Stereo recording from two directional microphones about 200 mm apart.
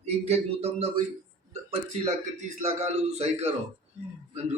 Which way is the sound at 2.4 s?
35° right (ahead or behind).